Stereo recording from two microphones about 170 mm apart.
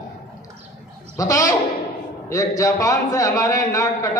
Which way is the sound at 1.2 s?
20° left (ahead or behind).